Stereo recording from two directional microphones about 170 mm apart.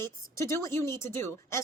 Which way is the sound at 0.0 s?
15° left (ahead or behind).